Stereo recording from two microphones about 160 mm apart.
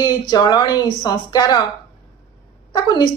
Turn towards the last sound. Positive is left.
turn(degrees=25)  # may be behind; listen again after turning